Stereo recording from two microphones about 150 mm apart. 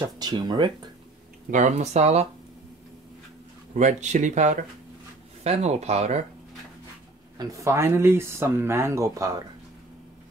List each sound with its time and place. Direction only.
0.0 s speech: 30° right (ahead or behind)
1.5 s speech: 55° right (ahead or behind)
3.7 s speech: 50° right (ahead or behind)
7.3 s speech: 20° right (ahead or behind)